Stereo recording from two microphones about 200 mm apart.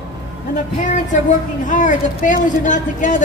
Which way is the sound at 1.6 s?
40° left (ahead or behind).